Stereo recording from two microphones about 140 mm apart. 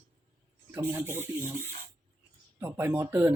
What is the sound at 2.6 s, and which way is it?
Speech, 20° right (ahead or behind).